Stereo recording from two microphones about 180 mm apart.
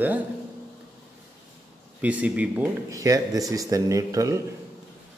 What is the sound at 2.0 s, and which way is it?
Speech, 10° right (ahead or behind).